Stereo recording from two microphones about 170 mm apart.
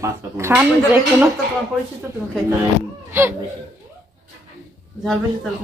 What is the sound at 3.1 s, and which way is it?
Speech, 15° right (ahead or behind).